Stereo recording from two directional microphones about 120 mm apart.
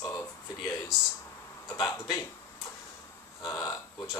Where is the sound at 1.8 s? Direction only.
25° left (ahead or behind).